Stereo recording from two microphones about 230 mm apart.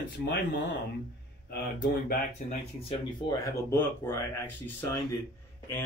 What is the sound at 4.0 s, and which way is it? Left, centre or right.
Speech, centre.